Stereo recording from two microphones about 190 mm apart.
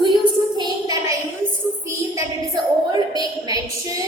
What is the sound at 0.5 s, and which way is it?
Speech, 20° right (ahead or behind).